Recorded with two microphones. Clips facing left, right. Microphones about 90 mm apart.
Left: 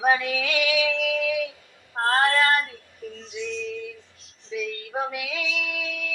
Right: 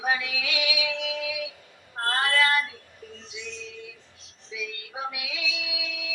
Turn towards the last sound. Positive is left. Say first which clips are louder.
# left 5 dB
turn(degrees=50)  # may be behind; listen again after turning